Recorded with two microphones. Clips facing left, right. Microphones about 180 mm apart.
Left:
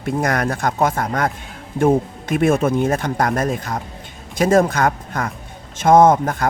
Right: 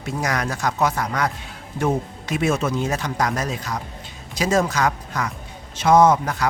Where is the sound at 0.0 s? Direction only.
55° left (ahead or behind).